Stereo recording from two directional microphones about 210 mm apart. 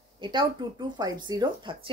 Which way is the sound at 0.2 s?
20° right (ahead or behind).